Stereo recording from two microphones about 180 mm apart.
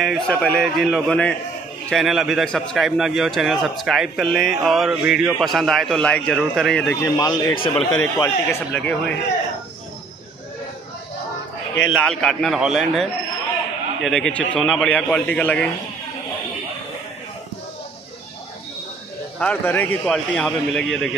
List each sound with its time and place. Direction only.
0.0 s a man's voice: 5° left (ahead or behind)
7.2 s a man's voice: 20° left (ahead or behind)
11.9 s a man's voice: 5° left (ahead or behind)
19.4 s a man's voice: 10° left (ahead or behind)